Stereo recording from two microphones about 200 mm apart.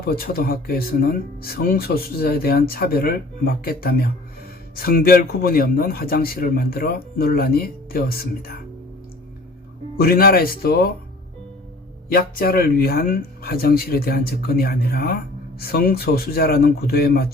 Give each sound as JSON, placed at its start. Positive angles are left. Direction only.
{"t": 0.0, "sound": "speech", "side_deg": 50}
{"t": 10.0, "sound": "speech", "side_deg": 50}
{"t": 12.0, "sound": "speech", "side_deg": 50}